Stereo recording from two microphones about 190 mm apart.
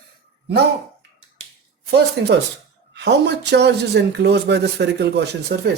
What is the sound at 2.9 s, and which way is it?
Speech, 65° right (ahead or behind).